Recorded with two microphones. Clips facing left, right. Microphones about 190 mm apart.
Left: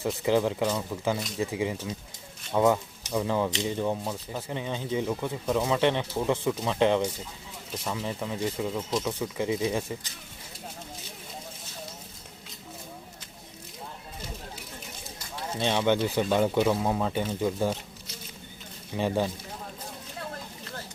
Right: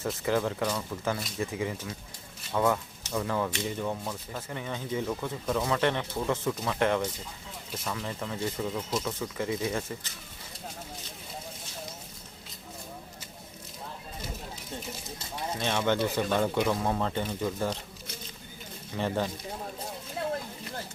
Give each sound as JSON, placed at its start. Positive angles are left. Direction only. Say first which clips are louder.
{"t": 0.0, "sound": "speech", "louder": "left 4 dB", "side_deg": 15}
{"t": 7.9, "sound": "speech", "louder": "left 3 dB", "side_deg": 10}
{"t": 15.6, "sound": "speech", "louder": "left 3 dB", "side_deg": 10}
{"t": 18.9, "sound": "speech", "louder": "left 3 dB", "side_deg": 15}